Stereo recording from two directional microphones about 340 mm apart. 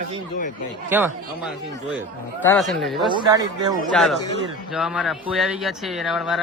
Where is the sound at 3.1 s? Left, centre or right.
Centre.